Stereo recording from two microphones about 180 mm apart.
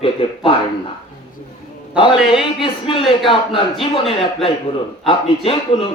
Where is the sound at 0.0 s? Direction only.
30° left (ahead or behind).